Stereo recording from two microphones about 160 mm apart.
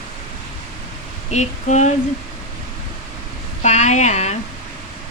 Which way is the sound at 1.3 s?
45° left (ahead or behind).